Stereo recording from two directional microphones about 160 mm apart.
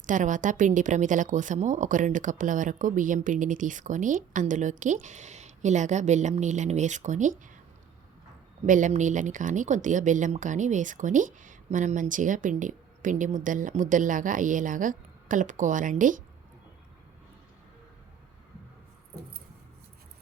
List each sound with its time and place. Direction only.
0.0 s speech: 50° right (ahead or behind)
8.6 s speech: 55° right (ahead or behind)